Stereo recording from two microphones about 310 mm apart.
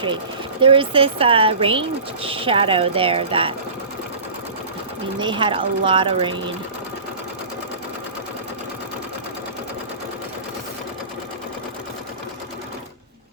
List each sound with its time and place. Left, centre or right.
0.6 s speech: centre
5.2 s speech: centre